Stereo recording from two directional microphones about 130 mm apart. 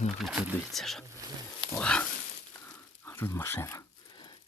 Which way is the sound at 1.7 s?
5° left (ahead or behind).